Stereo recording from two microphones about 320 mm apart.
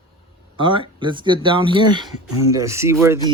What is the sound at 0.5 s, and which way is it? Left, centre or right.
Speech, centre.